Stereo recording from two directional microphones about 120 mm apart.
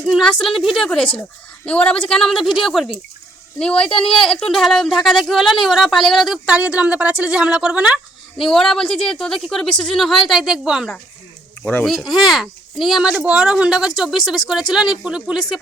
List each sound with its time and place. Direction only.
0.1 s a woman's voice: centre (ahead or behind)
11.6 s speech: 15° left (ahead or behind)
11.9 s speech: centre (ahead or behind)